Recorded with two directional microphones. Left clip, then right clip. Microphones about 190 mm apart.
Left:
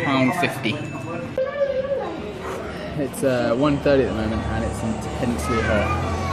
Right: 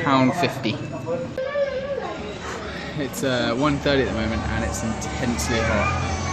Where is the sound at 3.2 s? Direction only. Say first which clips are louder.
Left 2 dB; centre (ahead or behind).